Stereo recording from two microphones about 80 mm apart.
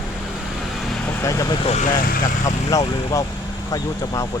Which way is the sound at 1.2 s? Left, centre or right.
Left.